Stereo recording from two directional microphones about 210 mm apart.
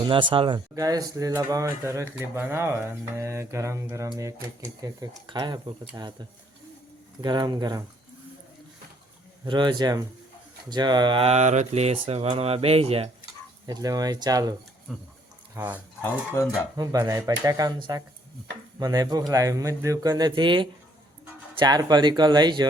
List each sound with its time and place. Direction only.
0.1 s speech: 25° right (ahead or behind)
7.2 s speech: 20° right (ahead or behind)
9.5 s speech: 20° right (ahead or behind)
13.7 s speech: 20° right (ahead or behind)
14.9 s pig: centre (ahead or behind)
15.5 s speech: 10° right (ahead or behind)
16.0 s speech: 15° left (ahead or behind)
16.7 s speech: 15° right (ahead or behind)